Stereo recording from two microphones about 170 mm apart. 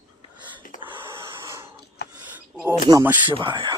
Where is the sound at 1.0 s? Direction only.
15° right (ahead or behind).